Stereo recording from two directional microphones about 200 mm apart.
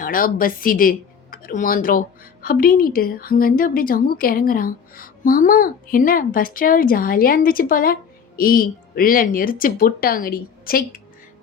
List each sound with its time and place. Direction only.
0.0 s speech: 45° left (ahead or behind)